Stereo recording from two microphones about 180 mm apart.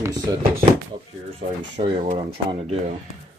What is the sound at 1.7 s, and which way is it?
Speech, 40° right (ahead or behind).